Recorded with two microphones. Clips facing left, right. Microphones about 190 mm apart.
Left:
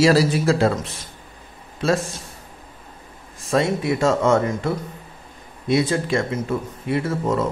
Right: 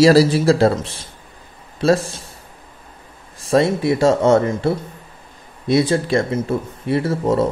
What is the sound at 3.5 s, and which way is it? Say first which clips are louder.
A man's voice: right 4 dB; 35° right (ahead or behind).